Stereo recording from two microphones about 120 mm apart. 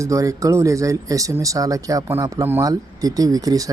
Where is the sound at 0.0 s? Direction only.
25° right (ahead or behind).